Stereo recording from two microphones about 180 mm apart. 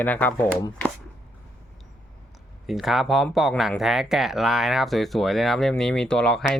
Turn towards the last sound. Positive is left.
turn(degrees=5)  # may be behind; listen again after turning